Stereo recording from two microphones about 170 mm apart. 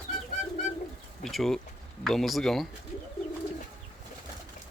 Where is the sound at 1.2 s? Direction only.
Centre (ahead or behind).